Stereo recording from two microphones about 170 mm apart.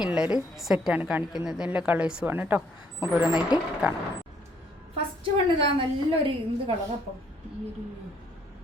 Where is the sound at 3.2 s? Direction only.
25° left (ahead or behind).